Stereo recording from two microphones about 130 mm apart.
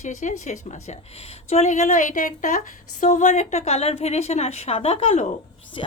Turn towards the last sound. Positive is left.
turn(degrees=50)  # may be behind; listen again after turning